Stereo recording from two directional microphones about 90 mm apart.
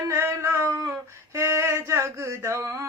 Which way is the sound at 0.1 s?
30° right (ahead or behind).